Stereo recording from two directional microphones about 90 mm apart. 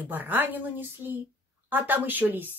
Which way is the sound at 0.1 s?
20° right (ahead or behind).